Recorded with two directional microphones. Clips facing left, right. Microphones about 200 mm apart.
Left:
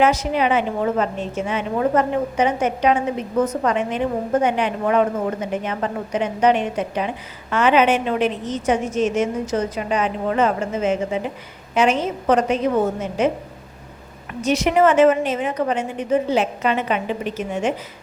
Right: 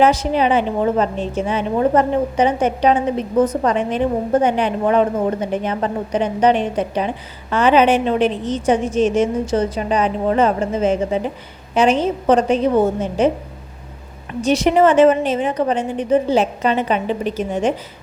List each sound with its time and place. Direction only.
0.0 s a woman's voice: 30° right (ahead or behind)
14.4 s a woman's voice: 30° right (ahead or behind)